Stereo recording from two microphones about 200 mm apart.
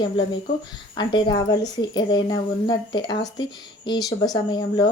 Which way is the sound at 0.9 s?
20° left (ahead or behind).